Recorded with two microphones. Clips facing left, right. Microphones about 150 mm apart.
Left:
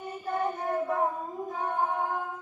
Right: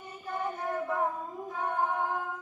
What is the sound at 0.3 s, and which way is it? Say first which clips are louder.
Child singing: left 4 dB; 20° left (ahead or behind).